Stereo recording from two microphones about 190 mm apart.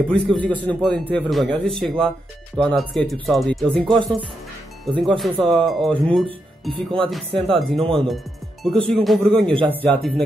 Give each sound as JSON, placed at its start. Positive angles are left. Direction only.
{"t": 0.3, "sound": "speech", "side_deg": 10}
{"t": 5.0, "sound": "speech", "side_deg": 0}
{"t": 6.7, "sound": "speech", "side_deg": -25}
{"t": 7.1, "sound": "speech", "side_deg": 0}